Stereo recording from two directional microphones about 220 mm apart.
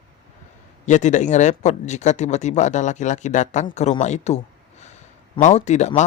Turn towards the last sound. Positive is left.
turn(degrees=30)  # may be behind; listen again after turning